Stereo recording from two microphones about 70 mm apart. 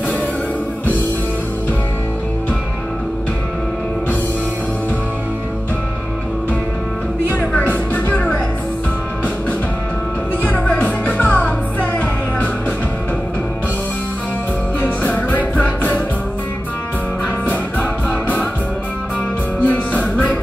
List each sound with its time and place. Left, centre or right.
7.2 s music: left
10.4 s music: left
14.8 s music: left
19.6 s music: left